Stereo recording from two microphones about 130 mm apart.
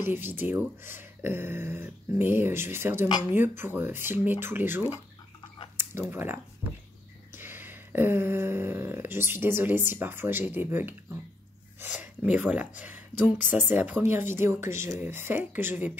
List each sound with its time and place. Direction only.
0.0 s speech: 15° right (ahead or behind)